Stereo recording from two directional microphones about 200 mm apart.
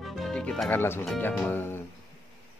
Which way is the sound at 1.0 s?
5° left (ahead or behind).